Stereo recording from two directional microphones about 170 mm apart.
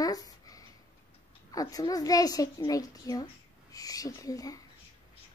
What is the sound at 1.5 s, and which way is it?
A child's voice, 20° left (ahead or behind).